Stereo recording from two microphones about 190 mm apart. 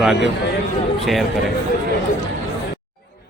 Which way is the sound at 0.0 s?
Centre (ahead or behind).